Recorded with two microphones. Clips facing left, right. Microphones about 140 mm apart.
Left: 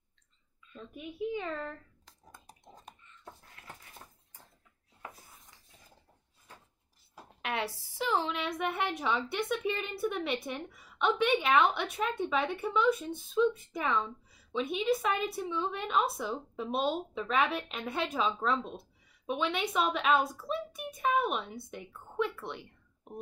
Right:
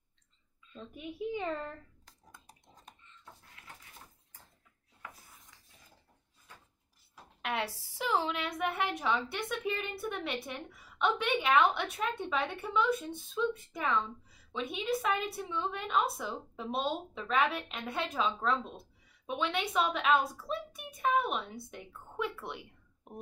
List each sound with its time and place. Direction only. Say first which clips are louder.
0.7 s a child's voice: left 1 dB; 25° right (ahead or behind)
7.4 s a woman's voice: even; centre (ahead or behind)